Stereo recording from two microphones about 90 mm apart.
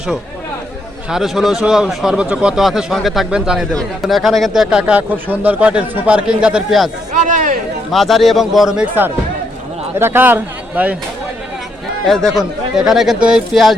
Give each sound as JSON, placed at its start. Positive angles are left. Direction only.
{"t": 1.1, "sound": "speech", "side_deg": -5}
{"t": 7.9, "sound": "speech", "side_deg": 0}
{"t": 10.0, "sound": "a man's voice", "side_deg": -25}
{"t": 12.0, "sound": "speech", "side_deg": 5}